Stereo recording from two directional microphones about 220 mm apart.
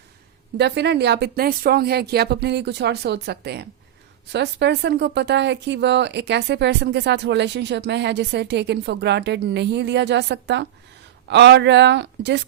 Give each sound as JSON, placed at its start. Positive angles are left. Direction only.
{"t": 0.5, "sound": "speech", "side_deg": -50}